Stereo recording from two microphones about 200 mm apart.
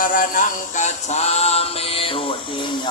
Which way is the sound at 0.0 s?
45° left (ahead or behind).